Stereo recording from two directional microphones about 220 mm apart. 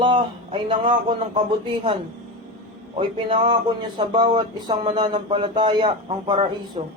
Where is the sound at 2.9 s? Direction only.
25° right (ahead or behind).